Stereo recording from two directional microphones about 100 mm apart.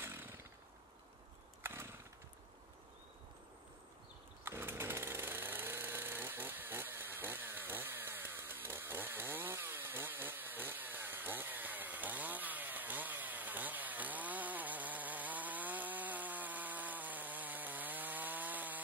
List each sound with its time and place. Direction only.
0.0 s chainsaw: 20° right (ahead or behind)
1.6 s chainsaw: 20° right (ahead or behind)
4.5 s power tool: 25° right (ahead or behind)